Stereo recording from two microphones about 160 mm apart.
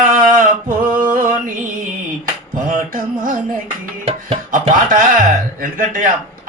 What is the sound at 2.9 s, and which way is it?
Music, 60° right (ahead or behind).